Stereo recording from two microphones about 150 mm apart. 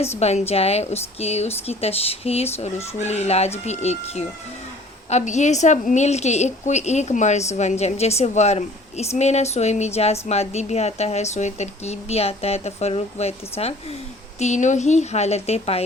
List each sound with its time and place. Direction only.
0.0 s a woman's voice: 45° left (ahead or behind)